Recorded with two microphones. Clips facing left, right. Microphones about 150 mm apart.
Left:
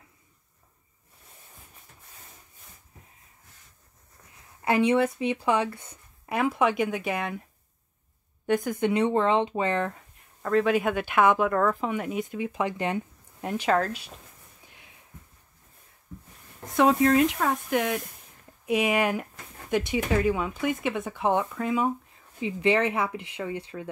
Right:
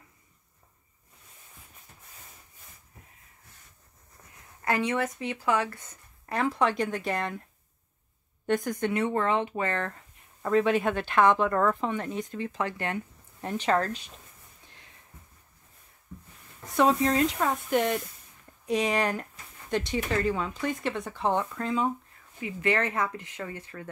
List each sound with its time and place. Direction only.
4.6 s speech: 15° left (ahead or behind)
8.5 s speech: 5° left (ahead or behind)
8.7 s speech: 20° left (ahead or behind)
10.4 s speech: centre (ahead or behind)
14.6 s a sound: 10° left (ahead or behind)
17.4 s speech: centre (ahead or behind)
22.4 s speech: 15° left (ahead or behind)